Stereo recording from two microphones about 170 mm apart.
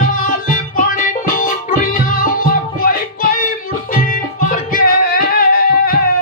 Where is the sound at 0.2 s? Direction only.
55° left (ahead or behind).